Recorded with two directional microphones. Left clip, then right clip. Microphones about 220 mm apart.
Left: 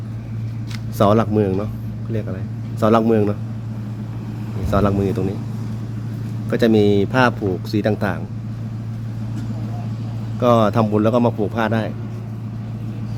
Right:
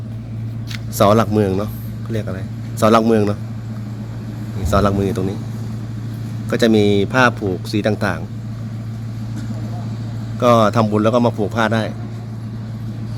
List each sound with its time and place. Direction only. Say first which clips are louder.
0.9 s speech: right 2 dB; 5° right (ahead or behind)
4.7 s speech: right 2 dB; 5° right (ahead or behind)
6.5 s speech: right 1 dB; 5° right (ahead or behind)
10.4 s speech: right 2 dB; centre (ahead or behind)